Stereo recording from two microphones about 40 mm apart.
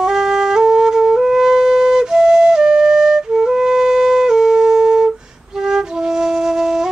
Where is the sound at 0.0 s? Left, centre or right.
Centre.